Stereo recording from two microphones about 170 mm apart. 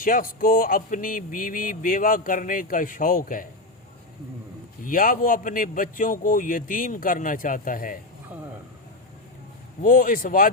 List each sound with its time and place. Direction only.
0.0 s speech: 55° left (ahead or behind)
4.8 s speech: 55° left (ahead or behind)
9.8 s speech: 55° left (ahead or behind)